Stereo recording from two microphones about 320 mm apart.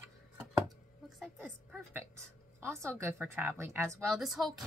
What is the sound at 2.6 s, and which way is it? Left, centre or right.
Speech, centre.